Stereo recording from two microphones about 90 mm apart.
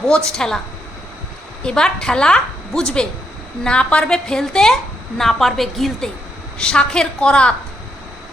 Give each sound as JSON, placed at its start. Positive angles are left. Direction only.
{"t": 0.3, "sound": "a woman's voice", "side_deg": 5}
{"t": 1.6, "sound": "a woman's voice", "side_deg": 10}